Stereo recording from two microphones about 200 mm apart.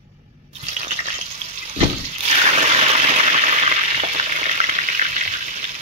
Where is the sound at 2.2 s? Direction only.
30° right (ahead or behind).